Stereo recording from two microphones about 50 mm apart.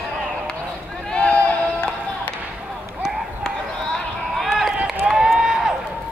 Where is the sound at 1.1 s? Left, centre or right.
Left.